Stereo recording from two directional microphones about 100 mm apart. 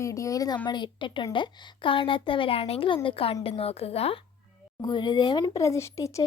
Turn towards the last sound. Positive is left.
turn(degrees=30)  # may be behind; listen again after turning